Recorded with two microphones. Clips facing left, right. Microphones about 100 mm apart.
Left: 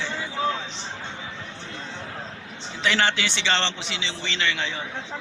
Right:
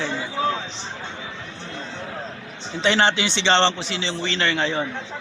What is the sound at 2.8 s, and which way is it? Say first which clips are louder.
A man's voice: right 4 dB; 25° right (ahead or behind).